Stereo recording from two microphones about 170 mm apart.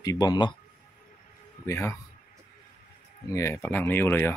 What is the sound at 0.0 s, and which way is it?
Speech, 25° left (ahead or behind).